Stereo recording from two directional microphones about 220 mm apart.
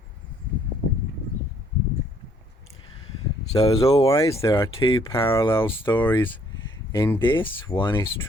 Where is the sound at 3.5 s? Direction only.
15° left (ahead or behind).